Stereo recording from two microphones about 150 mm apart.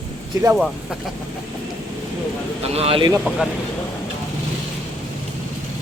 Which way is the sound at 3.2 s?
Centre (ahead or behind).